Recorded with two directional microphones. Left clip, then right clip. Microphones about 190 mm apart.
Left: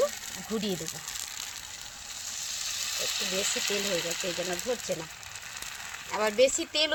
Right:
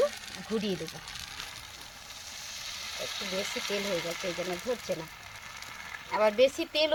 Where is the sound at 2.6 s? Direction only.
15° left (ahead or behind).